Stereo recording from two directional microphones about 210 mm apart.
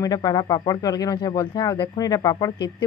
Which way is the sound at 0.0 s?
20° left (ahead or behind).